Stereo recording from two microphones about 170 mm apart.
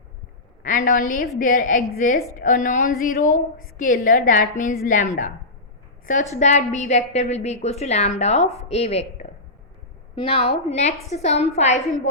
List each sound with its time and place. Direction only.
0.6 s a woman's voice: 50° left (ahead or behind)